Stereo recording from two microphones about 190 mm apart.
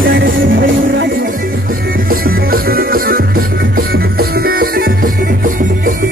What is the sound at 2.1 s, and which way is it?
Music, 50° right (ahead or behind).